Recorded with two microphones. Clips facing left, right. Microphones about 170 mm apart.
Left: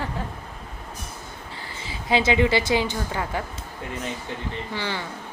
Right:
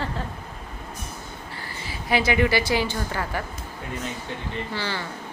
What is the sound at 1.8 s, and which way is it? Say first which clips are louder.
A woman's voice: left 1 dB; 20° left (ahead or behind).